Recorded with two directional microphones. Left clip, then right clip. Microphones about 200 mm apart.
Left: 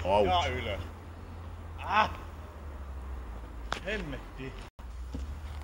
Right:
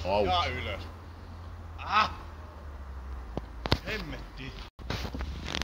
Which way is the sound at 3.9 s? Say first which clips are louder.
Left 1 dB; 35° left (ahead or behind).